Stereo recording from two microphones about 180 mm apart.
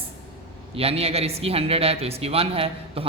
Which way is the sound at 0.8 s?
35° right (ahead or behind).